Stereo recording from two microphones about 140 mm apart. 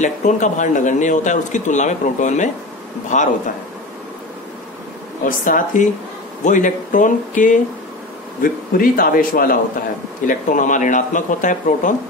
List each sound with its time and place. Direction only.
0.0 s speech: 60° left (ahead or behind)
5.2 s speech: 70° left (ahead or behind)
8.4 s a man's voice: 90° left
10.2 s speech: 65° left (ahead or behind)